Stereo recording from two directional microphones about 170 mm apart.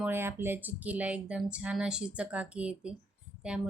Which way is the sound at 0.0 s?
15° right (ahead or behind).